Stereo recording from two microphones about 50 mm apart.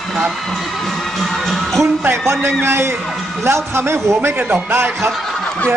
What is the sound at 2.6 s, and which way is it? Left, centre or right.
A man's voice, right.